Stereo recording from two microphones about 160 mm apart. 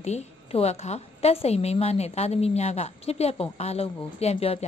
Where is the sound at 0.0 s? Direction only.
40° left (ahead or behind).